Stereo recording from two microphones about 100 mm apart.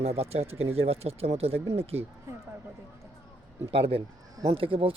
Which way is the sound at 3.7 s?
65° right (ahead or behind).